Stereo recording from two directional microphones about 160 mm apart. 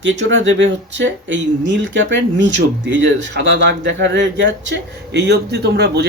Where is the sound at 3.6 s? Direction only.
90° right.